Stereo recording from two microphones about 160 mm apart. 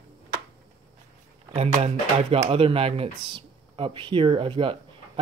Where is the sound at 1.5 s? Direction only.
45° right (ahead or behind).